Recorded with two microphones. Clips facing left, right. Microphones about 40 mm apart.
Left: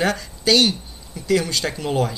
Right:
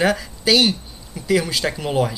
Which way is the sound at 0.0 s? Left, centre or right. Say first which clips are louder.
Right 2 dB; centre.